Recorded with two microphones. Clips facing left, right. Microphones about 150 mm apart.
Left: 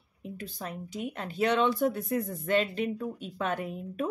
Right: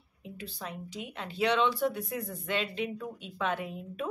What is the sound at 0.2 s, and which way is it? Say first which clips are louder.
Speech: left 3 dB; 45° left (ahead or behind).